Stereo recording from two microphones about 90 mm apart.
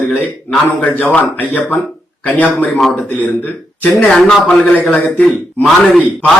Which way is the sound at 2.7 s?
5° left (ahead or behind).